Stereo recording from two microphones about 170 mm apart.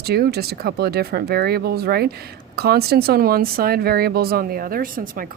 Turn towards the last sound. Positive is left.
turn(degrees=-55)  # may be behind; listen again after turning